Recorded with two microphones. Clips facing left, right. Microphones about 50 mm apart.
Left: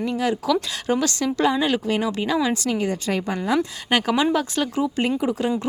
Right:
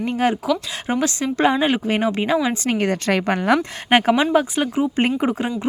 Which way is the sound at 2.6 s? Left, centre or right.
Right.